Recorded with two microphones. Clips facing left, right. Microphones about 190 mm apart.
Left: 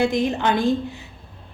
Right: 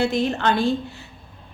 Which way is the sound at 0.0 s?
15° left (ahead or behind).